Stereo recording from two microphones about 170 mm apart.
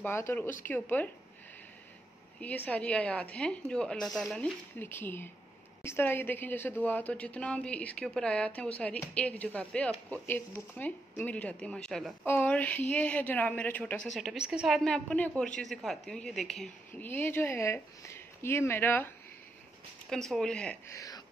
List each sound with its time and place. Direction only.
0.0 s a woman's voice: 15° left (ahead or behind)
2.4 s a woman's voice: 10° left (ahead or behind)
20.9 s speech: 20° left (ahead or behind)